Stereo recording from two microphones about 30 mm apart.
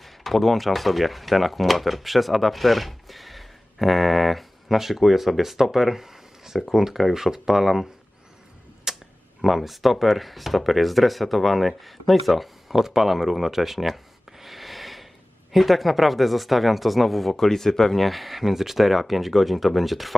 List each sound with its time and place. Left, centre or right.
0.0 s speech: centre
4.8 s speech: centre
5.7 s a sound: centre
6.7 s speech: centre
8.9 s a sound: centre
9.4 s speech: centre
17.3 s speech: centre
18.0 s speech: centre